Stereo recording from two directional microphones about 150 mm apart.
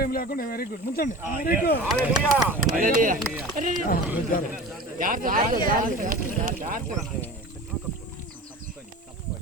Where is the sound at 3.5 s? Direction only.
60° right (ahead or behind).